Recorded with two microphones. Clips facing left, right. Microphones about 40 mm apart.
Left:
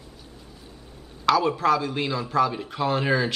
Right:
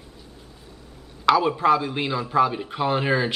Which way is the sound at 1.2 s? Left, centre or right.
Centre.